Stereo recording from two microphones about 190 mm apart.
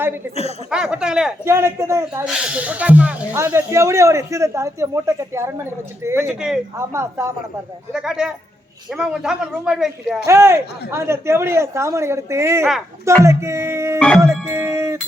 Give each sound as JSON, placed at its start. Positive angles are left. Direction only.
{"t": 0.7, "sound": "speech", "side_deg": -5}
{"t": 7.9, "sound": "speech", "side_deg": -5}
{"t": 10.2, "sound": "speech", "side_deg": -15}